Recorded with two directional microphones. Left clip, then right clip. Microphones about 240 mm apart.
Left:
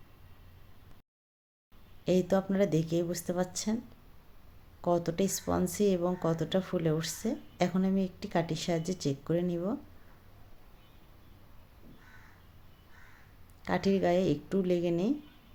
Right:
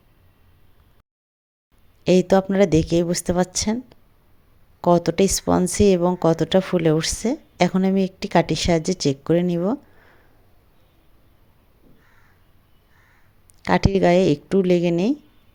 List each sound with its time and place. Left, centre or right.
2.0 s speech: right
4.8 s speech: right
13.6 s speech: right